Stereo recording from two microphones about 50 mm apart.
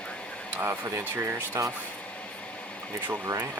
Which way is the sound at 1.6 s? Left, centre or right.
Right.